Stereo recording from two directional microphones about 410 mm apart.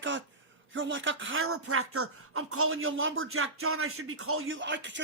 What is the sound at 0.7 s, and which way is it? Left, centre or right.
Speech, right.